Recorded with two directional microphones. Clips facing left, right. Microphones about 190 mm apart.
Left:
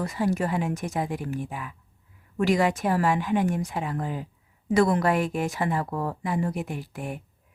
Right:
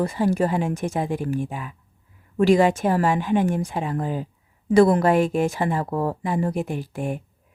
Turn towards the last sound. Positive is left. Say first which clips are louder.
# right 6 dB
turn(degrees=-25)  # may be behind; listen again after turning